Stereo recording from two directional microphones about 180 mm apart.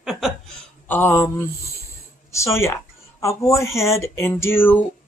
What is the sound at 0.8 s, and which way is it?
Speech, 10° left (ahead or behind).